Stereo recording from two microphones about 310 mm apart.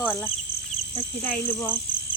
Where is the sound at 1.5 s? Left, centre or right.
Centre.